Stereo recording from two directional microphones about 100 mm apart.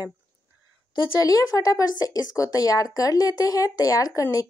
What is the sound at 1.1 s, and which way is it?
Speech, 35° left (ahead or behind).